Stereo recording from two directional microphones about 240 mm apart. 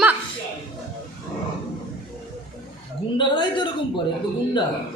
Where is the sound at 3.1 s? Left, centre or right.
Centre.